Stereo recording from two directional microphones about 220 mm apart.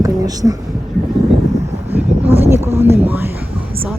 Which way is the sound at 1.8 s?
10° right (ahead or behind).